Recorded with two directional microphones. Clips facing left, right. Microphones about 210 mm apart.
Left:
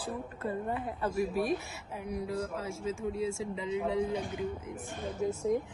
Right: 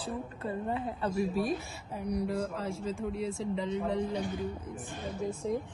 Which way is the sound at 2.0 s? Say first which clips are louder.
Right 3 dB; centre (ahead or behind).